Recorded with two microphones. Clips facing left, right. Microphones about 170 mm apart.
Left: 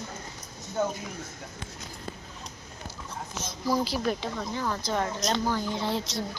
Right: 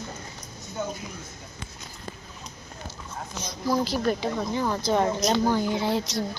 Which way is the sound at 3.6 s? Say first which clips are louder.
Right 3 dB; 5° left (ahead or behind).